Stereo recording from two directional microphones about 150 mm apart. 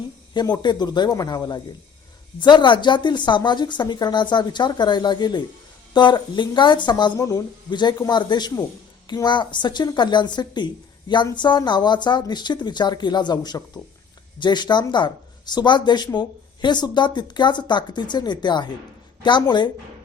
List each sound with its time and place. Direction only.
0.3 s a woman's voice: 30° left (ahead or behind)